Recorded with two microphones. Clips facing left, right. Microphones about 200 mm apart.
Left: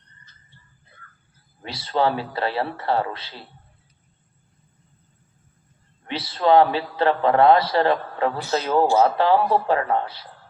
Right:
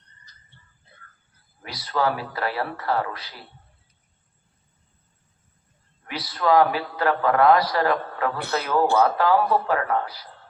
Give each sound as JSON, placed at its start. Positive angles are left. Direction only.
{"t": 1.6, "sound": "a man's voice", "side_deg": 25}
{"t": 6.1, "sound": "a man's voice", "side_deg": 25}
{"t": 8.4, "sound": "a man's voice", "side_deg": -60}
{"t": 9.0, "sound": "a man's voice", "side_deg": 30}